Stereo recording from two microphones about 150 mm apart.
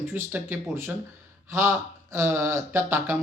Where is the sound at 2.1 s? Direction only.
15° right (ahead or behind).